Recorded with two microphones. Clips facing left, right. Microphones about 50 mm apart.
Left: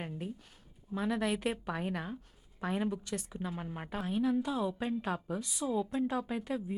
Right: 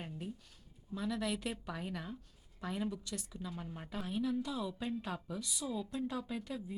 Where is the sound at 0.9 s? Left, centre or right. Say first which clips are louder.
Left 5 dB; left.